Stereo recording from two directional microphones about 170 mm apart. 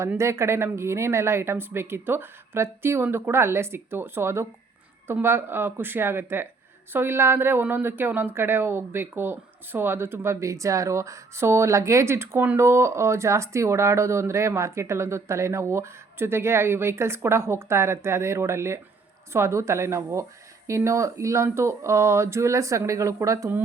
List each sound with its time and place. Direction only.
0.0 s a woman's voice: 15° right (ahead or behind)